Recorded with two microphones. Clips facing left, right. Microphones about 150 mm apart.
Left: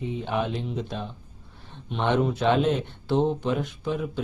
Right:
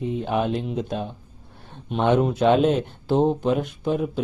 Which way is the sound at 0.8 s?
50° right (ahead or behind).